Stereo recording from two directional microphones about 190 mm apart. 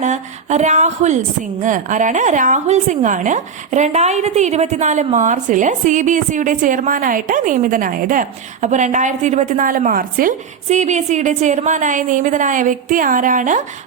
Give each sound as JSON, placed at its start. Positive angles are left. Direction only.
{"t": 0.0, "sound": "a woman's voice", "side_deg": -40}